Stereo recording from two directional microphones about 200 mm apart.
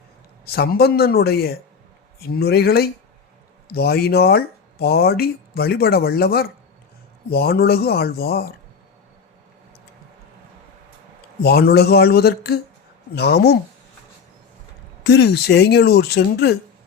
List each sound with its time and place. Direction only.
0.4 s speech: 50° left (ahead or behind)
11.4 s speech: 50° left (ahead or behind)
15.0 s speech: 55° left (ahead or behind)